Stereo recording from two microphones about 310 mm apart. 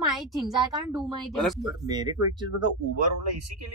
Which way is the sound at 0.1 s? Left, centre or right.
Centre.